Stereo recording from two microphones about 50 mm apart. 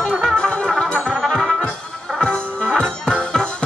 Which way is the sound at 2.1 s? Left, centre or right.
Centre.